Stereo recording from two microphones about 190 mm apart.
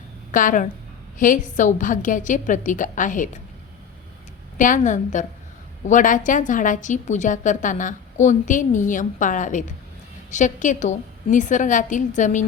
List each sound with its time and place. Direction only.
0.3 s a woman's voice: 45° left (ahead or behind)
4.5 s a woman's voice: 45° left (ahead or behind)